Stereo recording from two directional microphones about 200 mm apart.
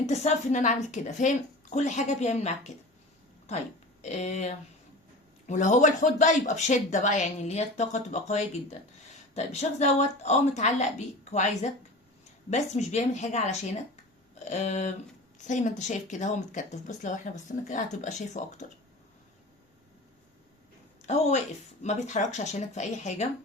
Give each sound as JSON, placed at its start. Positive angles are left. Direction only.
{"t": 0.0, "sound": "speech", "side_deg": 35}
{"t": 4.0, "sound": "speech", "side_deg": 35}
{"t": 14.3, "sound": "a sound", "side_deg": 35}
{"t": 15.4, "sound": "speech", "side_deg": 35}
{"t": 21.0, "sound": "speech", "side_deg": 35}